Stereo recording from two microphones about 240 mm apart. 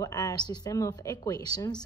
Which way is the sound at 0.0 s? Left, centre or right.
Centre.